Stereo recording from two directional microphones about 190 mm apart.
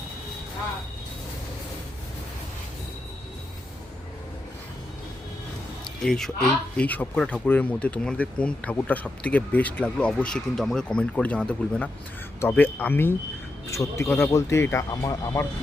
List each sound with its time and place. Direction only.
6.0 s speech: centre (ahead or behind)